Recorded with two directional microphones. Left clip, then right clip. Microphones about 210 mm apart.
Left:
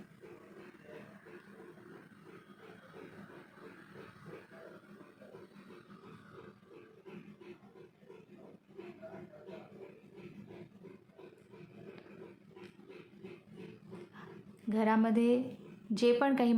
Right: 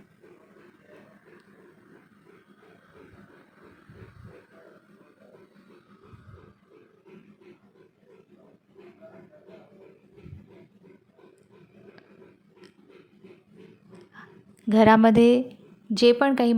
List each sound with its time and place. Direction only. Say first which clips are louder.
14.7 s a woman's voice: right 14 dB; 40° right (ahead or behind)